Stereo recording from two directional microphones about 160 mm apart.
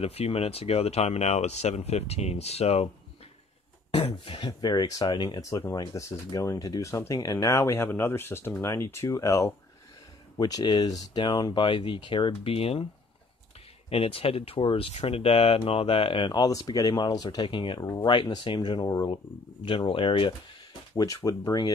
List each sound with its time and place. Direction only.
0.0 s speech: 40° left (ahead or behind)
3.9 s speech: 35° left (ahead or behind)
13.8 s speech: 35° left (ahead or behind)
20.9 s speech: 20° left (ahead or behind)